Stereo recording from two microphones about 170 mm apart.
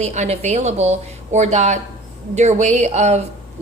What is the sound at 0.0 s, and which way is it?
A woman's voice, 40° right (ahead or behind).